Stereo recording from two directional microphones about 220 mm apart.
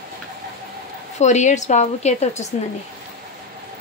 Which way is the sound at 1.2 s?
30° left (ahead or behind).